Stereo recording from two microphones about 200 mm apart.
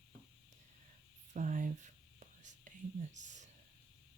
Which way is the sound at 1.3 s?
40° right (ahead or behind).